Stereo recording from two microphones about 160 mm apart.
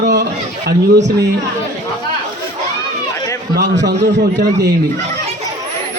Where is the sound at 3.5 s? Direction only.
85° right.